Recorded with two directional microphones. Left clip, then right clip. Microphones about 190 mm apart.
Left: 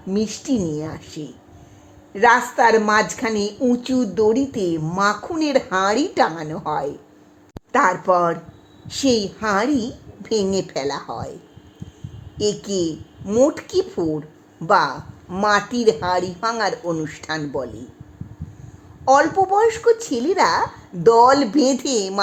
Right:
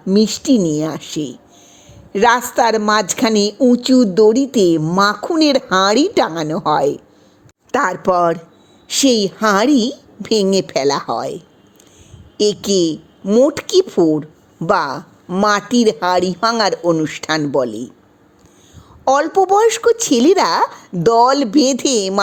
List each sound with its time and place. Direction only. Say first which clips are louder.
0.1 s a woman's voice: right 8 dB; 40° right (ahead or behind)
12.4 s a woman's voice: right 7 dB; 40° right (ahead or behind)
13.2 s a woman's voice: right 4 dB; 25° right (ahead or behind)
13.5 s a woman's voice: right 7 dB; 40° right (ahead or behind)
19.0 s a woman's voice: right 2 dB; 35° right (ahead or behind)